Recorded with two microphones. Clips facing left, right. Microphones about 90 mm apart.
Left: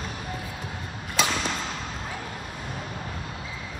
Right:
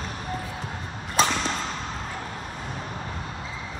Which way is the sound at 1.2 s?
40° right (ahead or behind).